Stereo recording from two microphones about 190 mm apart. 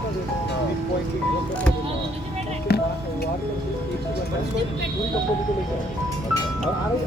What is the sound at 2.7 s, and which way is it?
Speech, 55° left (ahead or behind).